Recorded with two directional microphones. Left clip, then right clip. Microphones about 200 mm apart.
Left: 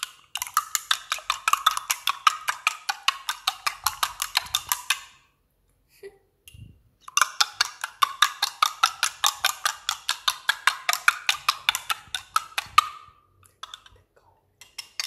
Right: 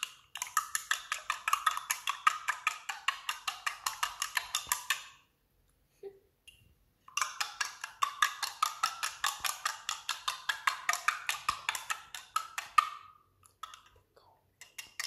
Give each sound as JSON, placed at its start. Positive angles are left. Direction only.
{"t": 0.0, "sound": "wood block", "side_deg": 15}
{"t": 7.1, "sound": "wood block", "side_deg": 25}